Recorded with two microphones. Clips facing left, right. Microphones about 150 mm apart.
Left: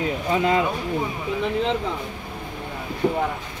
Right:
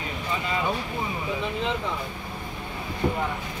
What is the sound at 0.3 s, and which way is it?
Speech, 75° left (ahead or behind).